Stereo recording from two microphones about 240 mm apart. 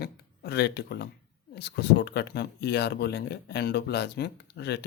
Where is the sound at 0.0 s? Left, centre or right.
Left.